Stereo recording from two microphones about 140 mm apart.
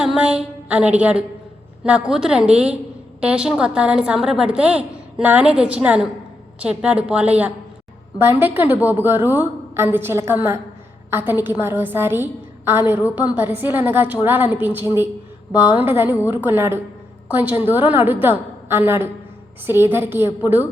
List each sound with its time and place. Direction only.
0.0 s a woman's voice: 5° right (ahead or behind)